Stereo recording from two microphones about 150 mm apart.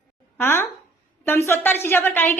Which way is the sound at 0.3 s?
15° left (ahead or behind).